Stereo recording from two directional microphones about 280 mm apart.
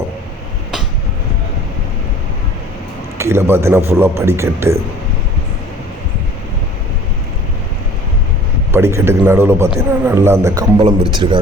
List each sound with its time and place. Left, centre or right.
3.2 s a man's voice: centre
8.7 s a man's voice: centre